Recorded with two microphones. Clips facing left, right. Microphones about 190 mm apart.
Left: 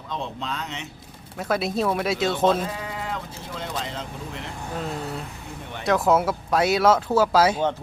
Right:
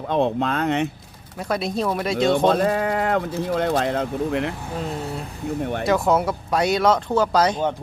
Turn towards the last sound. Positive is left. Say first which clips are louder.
# even
turn(degrees=5)  # may be behind; listen again after turning